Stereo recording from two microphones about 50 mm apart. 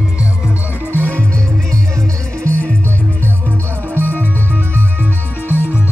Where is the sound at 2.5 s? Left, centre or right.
Right.